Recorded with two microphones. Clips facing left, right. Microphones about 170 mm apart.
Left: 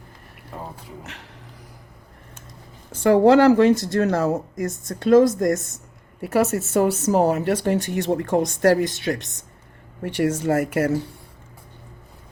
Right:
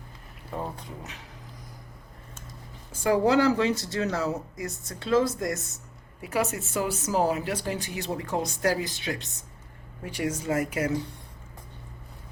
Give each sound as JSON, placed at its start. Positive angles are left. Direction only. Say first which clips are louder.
{"t": 0.5, "sound": "a sound", "louder": "right 2 dB", "side_deg": -5}
{"t": 3.0, "sound": "speech", "louder": "left 8 dB", "side_deg": 65}
{"t": 6.2, "sound": "a woman's voice", "louder": "left 8 dB", "side_deg": 60}
{"t": 9.1, "sound": "speech", "louder": "left 5 dB", "side_deg": 45}
{"t": 10.0, "sound": "a woman's voice", "louder": "left 8 dB", "side_deg": 60}